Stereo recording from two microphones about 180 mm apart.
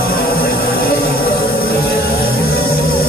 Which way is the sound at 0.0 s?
55° left (ahead or behind).